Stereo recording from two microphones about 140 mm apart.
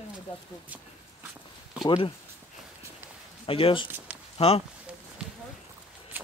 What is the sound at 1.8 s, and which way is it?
Speech, 35° left (ahead or behind).